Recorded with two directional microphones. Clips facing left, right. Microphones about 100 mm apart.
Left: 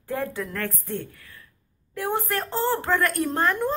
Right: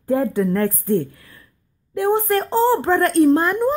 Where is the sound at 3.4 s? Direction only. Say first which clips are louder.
Right 5 dB; 15° right (ahead or behind).